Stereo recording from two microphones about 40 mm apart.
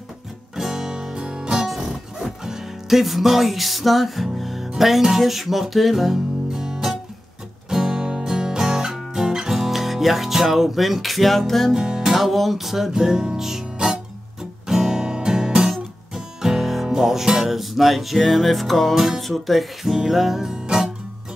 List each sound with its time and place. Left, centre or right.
0.6 s music: centre
1.7 s music: centre
11.7 s music: centre
12.1 s music: centre
14.7 s guitar: centre
15.7 s music: centre
18.9 s music: centre
20.5 s music: right